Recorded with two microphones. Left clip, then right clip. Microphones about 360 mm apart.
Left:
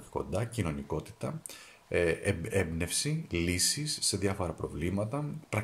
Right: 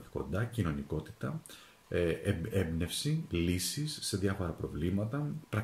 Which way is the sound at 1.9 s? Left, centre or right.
Centre.